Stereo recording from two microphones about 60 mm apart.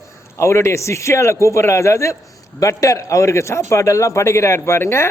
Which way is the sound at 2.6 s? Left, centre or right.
Left.